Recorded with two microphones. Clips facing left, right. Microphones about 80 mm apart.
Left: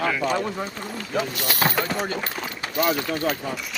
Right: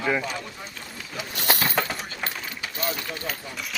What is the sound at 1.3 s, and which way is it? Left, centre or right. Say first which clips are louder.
Speech: right 2 dB; right.